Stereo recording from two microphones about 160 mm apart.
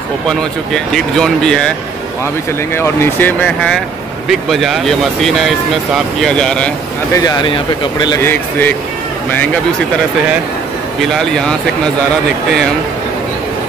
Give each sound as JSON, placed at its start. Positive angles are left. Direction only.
{"t": 0.3, "sound": "speech", "side_deg": 5}
{"t": 2.7, "sound": "speech", "side_deg": 15}
{"t": 7.2, "sound": "speech", "side_deg": 25}
{"t": 8.2, "sound": "speech", "side_deg": 15}
{"t": 11.0, "sound": "speech", "side_deg": 5}